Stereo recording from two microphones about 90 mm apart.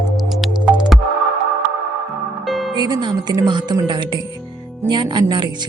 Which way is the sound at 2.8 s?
50° right (ahead or behind).